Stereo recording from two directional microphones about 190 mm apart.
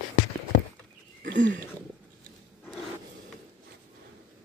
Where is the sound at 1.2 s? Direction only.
70° right (ahead or behind).